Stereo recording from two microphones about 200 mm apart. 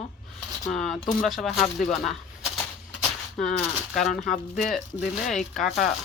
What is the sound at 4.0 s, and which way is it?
Speech, centre (ahead or behind).